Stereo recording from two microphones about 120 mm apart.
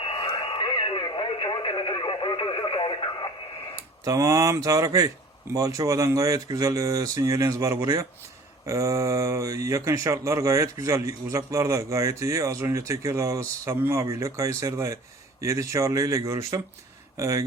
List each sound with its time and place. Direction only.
0.0 s radio: 50° left (ahead or behind)
4.0 s speech: 25° right (ahead or behind)